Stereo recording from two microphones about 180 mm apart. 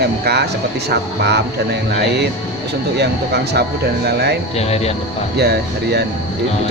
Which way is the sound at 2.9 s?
65° right (ahead or behind).